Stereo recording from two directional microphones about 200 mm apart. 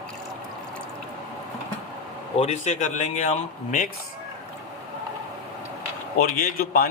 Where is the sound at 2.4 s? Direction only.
35° left (ahead or behind).